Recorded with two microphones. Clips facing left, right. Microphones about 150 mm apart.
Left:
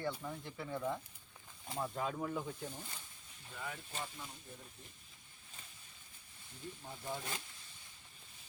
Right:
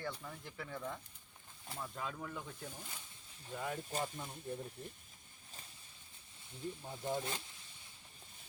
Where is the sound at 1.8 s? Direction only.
25° left (ahead or behind).